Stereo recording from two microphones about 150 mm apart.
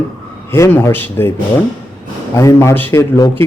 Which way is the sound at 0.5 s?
15° left (ahead or behind).